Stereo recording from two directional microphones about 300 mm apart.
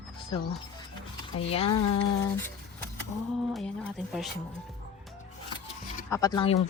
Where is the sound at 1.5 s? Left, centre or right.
Centre.